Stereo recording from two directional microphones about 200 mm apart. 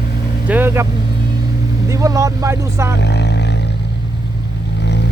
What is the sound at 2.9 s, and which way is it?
Roaring cats, 60° left (ahead or behind).